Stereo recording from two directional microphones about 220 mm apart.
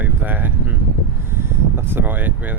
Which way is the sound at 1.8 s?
10° right (ahead or behind).